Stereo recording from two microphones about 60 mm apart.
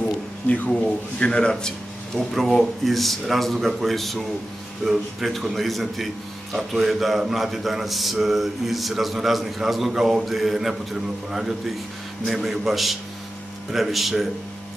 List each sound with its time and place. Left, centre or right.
0.5 s speech: left
2.1 s speech: centre